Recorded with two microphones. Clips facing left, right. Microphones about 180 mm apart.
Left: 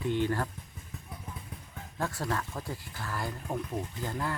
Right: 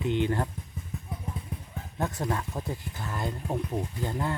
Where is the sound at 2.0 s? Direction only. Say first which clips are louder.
Right 3 dB; 20° right (ahead or behind).